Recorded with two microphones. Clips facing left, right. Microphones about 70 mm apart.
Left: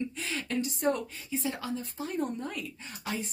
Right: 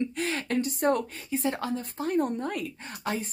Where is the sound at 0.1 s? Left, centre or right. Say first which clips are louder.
Right 5 dB; right.